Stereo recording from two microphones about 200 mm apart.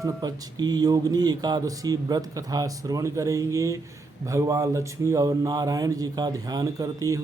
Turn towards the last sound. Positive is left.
turn(degrees=-15)  # may be behind; listen again after turning